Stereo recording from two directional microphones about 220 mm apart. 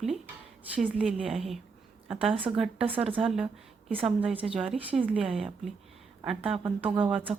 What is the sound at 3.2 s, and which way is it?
A woman's voice, 5° right (ahead or behind).